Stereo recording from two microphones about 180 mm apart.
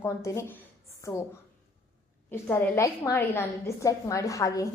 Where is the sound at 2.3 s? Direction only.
15° left (ahead or behind).